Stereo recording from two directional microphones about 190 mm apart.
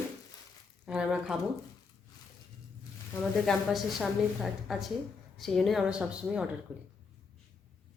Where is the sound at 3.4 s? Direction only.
Centre (ahead or behind).